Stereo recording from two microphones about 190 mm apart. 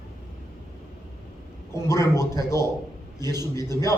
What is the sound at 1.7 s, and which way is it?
Speech, 15° left (ahead or behind).